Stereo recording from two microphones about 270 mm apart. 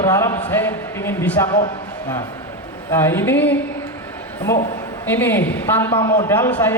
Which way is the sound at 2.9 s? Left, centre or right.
Centre.